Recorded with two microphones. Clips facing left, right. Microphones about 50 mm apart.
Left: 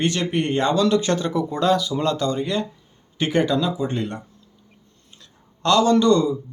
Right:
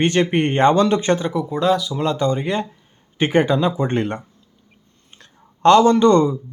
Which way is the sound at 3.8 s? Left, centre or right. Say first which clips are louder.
Right 4 dB; right.